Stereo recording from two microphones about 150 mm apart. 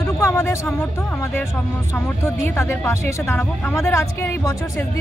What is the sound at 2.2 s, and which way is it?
Speech, 15° left (ahead or behind).